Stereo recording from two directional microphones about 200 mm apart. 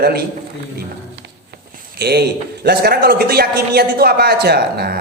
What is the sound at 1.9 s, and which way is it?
A man's voice, 55° right (ahead or behind).